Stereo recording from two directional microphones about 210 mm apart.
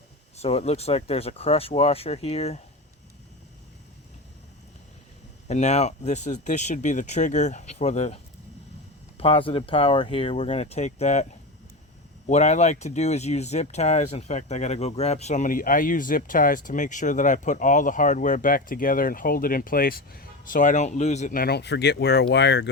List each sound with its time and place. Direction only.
0.3 s speech: 30° left (ahead or behind)
5.5 s speech: 35° left (ahead or behind)
12.3 s speech: 35° left (ahead or behind); by 22.7 s 55° left (ahead or behind)